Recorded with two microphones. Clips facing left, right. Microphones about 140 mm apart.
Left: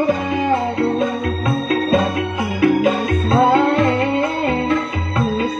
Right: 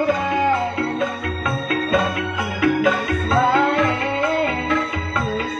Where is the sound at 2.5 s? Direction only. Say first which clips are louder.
Left 3 dB; 30° left (ahead or behind).